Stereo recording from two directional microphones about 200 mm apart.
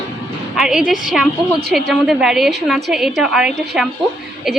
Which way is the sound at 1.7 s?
Centre (ahead or behind).